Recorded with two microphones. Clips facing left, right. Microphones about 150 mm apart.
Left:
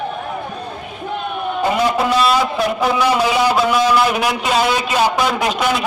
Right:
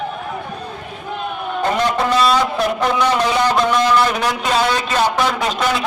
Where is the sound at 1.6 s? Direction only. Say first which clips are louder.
Left 1 dB; 5° left (ahead or behind).